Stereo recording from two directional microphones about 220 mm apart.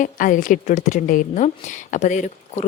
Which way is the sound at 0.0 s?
35° left (ahead or behind).